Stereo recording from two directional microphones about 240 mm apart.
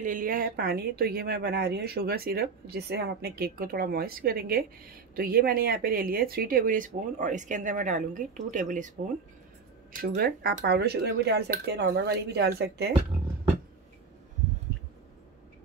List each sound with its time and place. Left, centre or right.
0.0 s speech: right
9.9 s speech: right